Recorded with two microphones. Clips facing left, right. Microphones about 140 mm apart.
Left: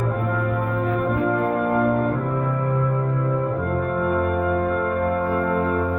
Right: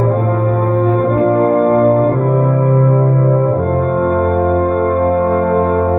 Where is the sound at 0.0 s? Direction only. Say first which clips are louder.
Right 9 dB; 50° right (ahead or behind).